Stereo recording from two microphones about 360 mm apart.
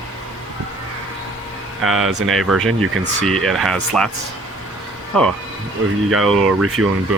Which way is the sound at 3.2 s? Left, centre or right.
Centre.